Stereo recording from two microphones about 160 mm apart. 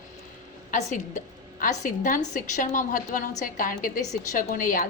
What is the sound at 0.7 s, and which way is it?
A woman's voice, 50° left (ahead or behind).